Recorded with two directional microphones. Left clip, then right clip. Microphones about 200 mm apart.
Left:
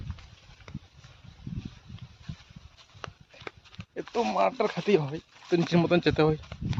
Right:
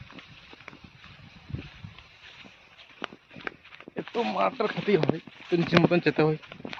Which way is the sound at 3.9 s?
Centre (ahead or behind).